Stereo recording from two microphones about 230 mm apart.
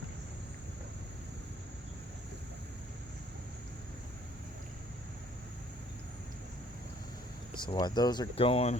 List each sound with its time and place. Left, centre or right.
7.5 s speech: centre